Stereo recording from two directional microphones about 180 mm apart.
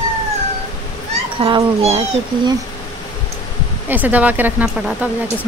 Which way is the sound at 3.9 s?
10° right (ahead or behind).